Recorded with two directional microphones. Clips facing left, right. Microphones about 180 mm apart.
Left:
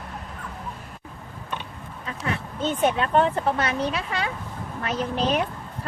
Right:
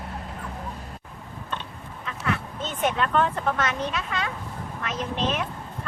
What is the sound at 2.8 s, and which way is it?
Speech, 30° left (ahead or behind).